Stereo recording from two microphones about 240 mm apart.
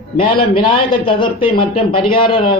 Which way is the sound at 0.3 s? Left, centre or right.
Left.